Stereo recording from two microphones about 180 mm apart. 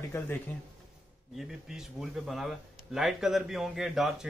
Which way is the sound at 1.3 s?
Centre (ahead or behind).